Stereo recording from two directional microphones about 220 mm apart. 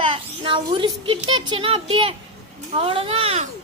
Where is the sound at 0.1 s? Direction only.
20° right (ahead or behind).